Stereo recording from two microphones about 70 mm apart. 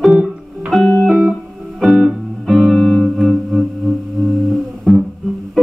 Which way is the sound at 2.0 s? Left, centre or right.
Centre.